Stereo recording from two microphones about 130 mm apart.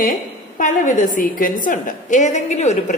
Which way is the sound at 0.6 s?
80° left.